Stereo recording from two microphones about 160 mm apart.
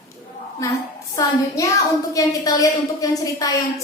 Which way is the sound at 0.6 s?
20° left (ahead or behind).